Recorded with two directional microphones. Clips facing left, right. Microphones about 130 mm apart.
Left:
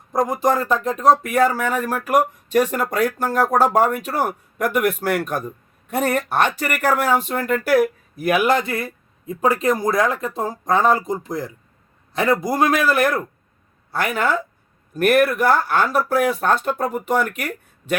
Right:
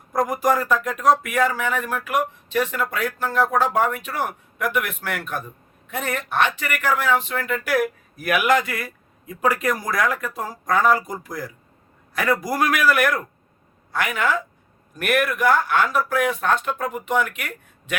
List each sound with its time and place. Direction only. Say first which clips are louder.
0.1 s speech: left 2 dB; 25° left (ahead or behind); by 7.8 s 40° left (ahead or behind)
8.1 s speech: left 1 dB; 25° left (ahead or behind)